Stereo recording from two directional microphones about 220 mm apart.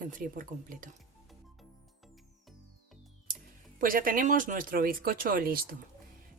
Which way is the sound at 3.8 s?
40° right (ahead or behind).